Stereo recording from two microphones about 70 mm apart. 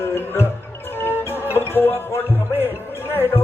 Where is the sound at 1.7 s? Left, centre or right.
Left.